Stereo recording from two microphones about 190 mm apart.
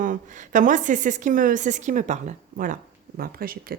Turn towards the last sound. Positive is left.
turn(degrees=-50)  # may be behind; listen again after turning